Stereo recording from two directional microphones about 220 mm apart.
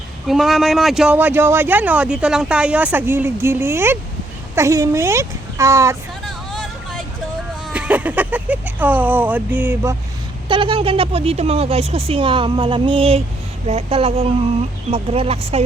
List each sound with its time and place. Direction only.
0.3 s speech: centre (ahead or behind)
6.2 s vehicle: centre (ahead or behind)
7.7 s speech: 5° right (ahead or behind)
10.5 s speech: 25° right (ahead or behind)